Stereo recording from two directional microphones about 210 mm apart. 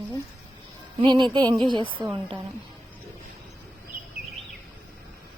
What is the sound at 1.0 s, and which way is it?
A woman's voice, 20° right (ahead or behind).